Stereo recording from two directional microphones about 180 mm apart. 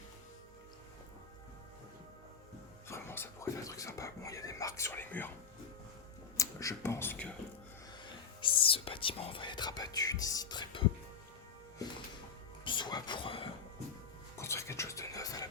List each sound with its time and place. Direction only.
2.9 s speech: 15° left (ahead or behind)
6.3 s speech: 20° left (ahead or behind)
8.4 s speech: 30° left (ahead or behind)
11.8 s music: 20° left (ahead or behind)
12.6 s a sound: 25° left (ahead or behind)
14.3 s whispering: 15° left (ahead or behind)